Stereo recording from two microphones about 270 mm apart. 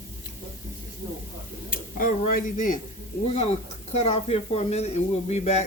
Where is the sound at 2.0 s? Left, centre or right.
Left.